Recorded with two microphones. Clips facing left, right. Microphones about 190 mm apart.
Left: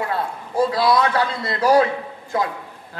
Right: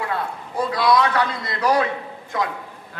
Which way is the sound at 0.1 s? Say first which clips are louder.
Left 2 dB; 30° left (ahead or behind).